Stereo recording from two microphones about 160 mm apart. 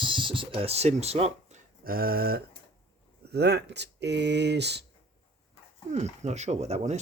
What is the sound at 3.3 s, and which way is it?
Speech, 90° right.